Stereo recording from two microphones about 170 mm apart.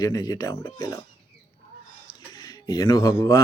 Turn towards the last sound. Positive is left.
turn(degrees=20)  # may be behind; listen again after turning